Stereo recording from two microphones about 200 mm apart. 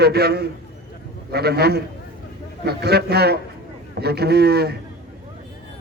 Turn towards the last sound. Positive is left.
turn(degrees=-50)  # may be behind; listen again after turning